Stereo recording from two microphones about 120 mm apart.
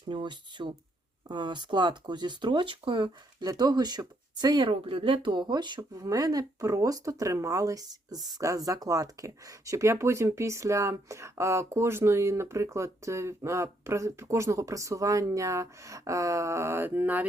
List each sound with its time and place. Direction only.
0.1 s speech: 40° right (ahead or behind); by 17.2 s 15° right (ahead or behind)